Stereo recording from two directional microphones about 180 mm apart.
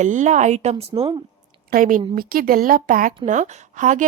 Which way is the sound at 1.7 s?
50° right (ahead or behind).